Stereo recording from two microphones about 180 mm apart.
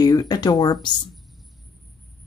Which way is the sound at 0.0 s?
20° left (ahead or behind).